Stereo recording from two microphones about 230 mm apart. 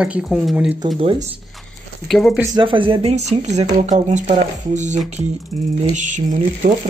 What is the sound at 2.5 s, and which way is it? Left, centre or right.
Speech, right.